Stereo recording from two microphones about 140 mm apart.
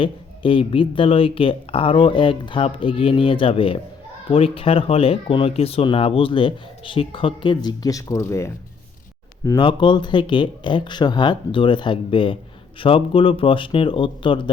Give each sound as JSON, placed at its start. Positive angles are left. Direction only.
{"t": 0.0, "sound": "speech", "side_deg": 40}
{"t": 9.6, "sound": "speech", "side_deg": 35}